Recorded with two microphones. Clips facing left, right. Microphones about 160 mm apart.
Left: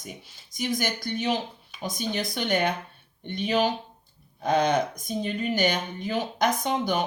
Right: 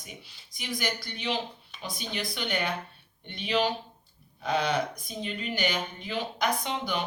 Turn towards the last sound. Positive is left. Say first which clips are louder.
# left 5 dB
turn(degrees=45)  # may be behind; listen again after turning